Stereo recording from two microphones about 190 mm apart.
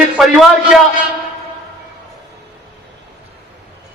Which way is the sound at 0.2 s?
Centre (ahead or behind).